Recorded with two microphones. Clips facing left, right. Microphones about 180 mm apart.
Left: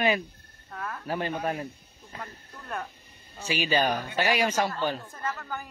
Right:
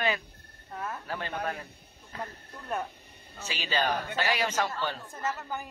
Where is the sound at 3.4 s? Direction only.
10° left (ahead or behind).